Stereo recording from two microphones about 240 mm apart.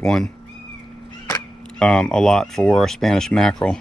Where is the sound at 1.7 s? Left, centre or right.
Centre.